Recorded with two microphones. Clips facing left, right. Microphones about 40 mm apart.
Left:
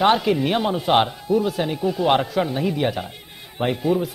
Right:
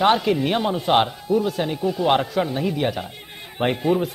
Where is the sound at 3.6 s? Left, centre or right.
Centre.